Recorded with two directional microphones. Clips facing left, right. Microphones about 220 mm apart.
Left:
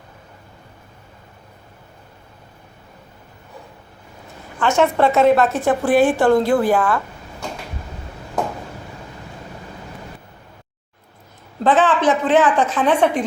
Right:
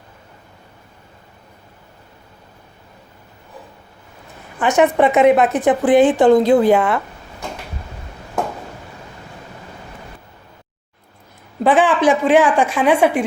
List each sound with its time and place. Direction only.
4.6 s a woman's voice: 15° right (ahead or behind)
11.6 s a woman's voice: 10° right (ahead or behind)